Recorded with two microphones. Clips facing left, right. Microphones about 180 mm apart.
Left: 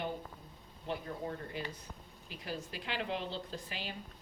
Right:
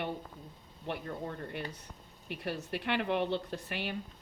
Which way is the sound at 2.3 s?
65° right (ahead or behind).